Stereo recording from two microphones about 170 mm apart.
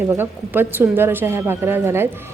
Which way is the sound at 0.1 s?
15° right (ahead or behind).